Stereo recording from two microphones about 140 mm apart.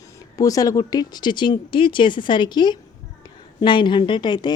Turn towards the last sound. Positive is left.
turn(degrees=30)  # may be behind; listen again after turning